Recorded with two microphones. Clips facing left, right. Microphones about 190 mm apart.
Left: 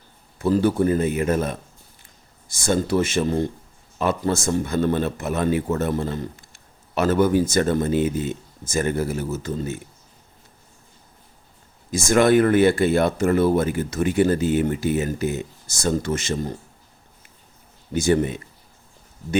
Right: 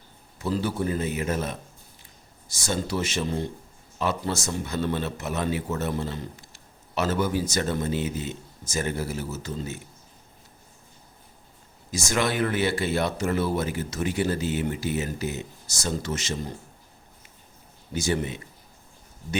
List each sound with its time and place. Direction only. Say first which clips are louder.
0.3 s a man's voice: left 8 dB; 55° left (ahead or behind)
11.9 s a man's voice: left 10 dB; 55° left (ahead or behind)
17.9 s a man's voice: left 7 dB; 55° left (ahead or behind)